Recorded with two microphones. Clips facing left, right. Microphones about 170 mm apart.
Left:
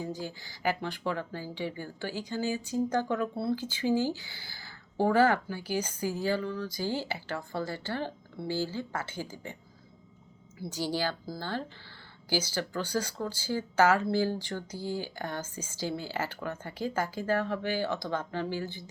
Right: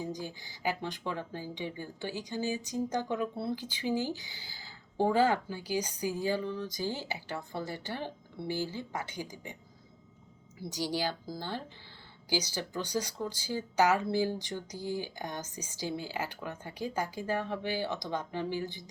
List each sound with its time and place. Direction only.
0.0 s speech: 15° right (ahead or behind)
10.6 s speech: 15° right (ahead or behind)